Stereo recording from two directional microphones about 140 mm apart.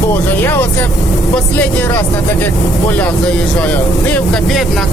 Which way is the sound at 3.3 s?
5° left (ahead or behind).